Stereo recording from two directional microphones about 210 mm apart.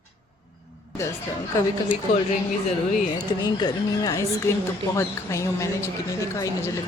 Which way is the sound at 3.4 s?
20° left (ahead or behind).